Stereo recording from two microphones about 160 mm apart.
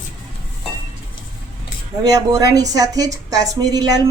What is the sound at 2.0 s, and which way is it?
A woman's voice, 25° right (ahead or behind).